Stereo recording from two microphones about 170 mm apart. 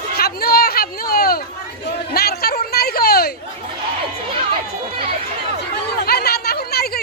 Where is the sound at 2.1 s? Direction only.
65° left (ahead or behind).